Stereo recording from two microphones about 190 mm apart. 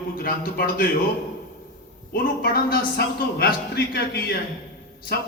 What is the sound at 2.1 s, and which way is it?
A man's voice, 55° left (ahead or behind).